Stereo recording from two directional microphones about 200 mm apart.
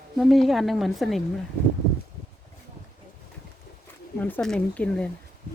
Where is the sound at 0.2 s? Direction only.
Centre (ahead or behind).